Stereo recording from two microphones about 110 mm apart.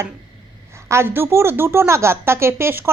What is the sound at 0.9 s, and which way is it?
Speech, 20° right (ahead or behind).